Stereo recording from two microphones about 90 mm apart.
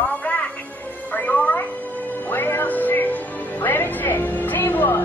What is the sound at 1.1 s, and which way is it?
Music, 15° left (ahead or behind).